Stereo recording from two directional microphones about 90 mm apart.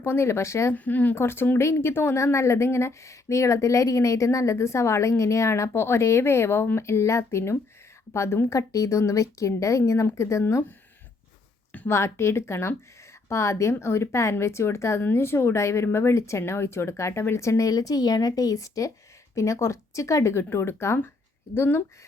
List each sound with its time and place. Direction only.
0.0 s speech: 30° left (ahead or behind)
0.7 s speech: 20° left (ahead or behind); by 10.4 s 35° left (ahead or behind)
11.9 s speech: 30° left (ahead or behind)